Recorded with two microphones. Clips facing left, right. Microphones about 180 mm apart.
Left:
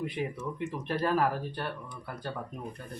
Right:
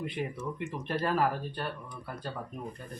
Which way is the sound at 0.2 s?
5° left (ahead or behind).